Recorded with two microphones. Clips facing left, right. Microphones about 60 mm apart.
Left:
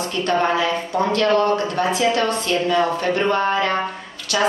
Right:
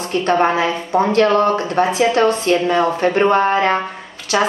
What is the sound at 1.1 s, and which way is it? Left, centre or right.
A woman's voice, right.